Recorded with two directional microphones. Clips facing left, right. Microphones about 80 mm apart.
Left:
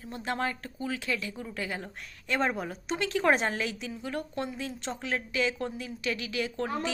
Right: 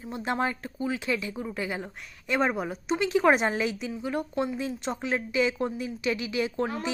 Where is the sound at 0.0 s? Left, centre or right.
Right.